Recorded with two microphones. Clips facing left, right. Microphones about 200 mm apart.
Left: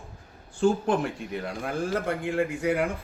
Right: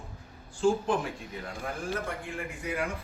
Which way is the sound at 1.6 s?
75° left (ahead or behind).